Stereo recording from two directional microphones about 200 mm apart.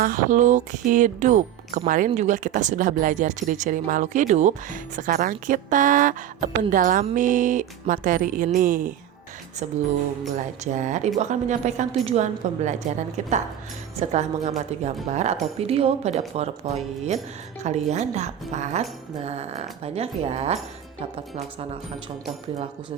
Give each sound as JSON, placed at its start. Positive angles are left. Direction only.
{"t": 0.0, "sound": "speech", "side_deg": -40}
{"t": 10.3, "sound": "speech", "side_deg": -35}
{"t": 13.9, "sound": "speech", "side_deg": -35}